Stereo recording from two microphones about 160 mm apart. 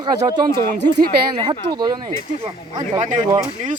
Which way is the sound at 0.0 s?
25° right (ahead or behind).